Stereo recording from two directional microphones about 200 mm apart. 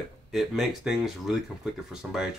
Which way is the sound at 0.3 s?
Centre (ahead or behind).